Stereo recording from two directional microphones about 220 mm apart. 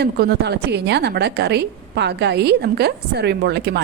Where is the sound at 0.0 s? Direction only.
50° right (ahead or behind).